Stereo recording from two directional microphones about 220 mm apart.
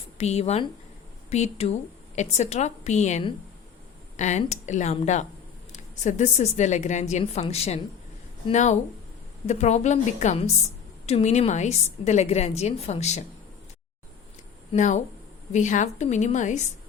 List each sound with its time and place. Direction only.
0.2 s a woman's voice: 30° left (ahead or behind)
14.7 s a woman's voice: 35° left (ahead or behind)